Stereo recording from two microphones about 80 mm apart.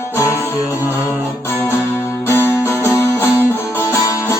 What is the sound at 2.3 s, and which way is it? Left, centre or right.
Music, left.